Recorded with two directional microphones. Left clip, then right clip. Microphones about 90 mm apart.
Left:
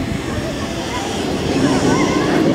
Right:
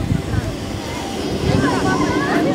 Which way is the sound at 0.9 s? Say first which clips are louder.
Left 2 dB; 30° left (ahead or behind).